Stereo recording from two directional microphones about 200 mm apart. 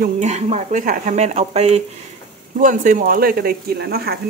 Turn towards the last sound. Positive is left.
turn(degrees=-50)  # may be behind; listen again after turning